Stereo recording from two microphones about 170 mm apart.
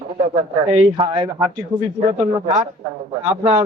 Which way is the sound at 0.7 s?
30° right (ahead or behind).